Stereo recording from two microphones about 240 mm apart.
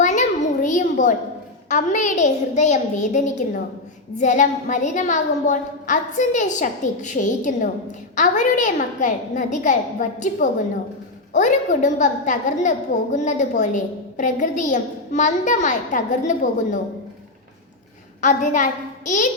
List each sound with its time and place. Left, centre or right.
0.0 s a sound: left
1.7 s a woman's voice: left
18.2 s a woman's voice: left